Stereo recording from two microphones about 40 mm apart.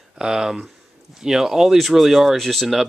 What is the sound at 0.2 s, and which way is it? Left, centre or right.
Speech, centre.